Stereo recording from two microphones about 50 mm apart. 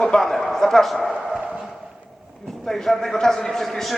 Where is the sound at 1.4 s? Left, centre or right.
Centre.